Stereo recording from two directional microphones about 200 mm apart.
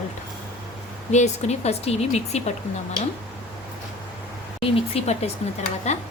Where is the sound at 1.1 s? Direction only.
35° left (ahead or behind).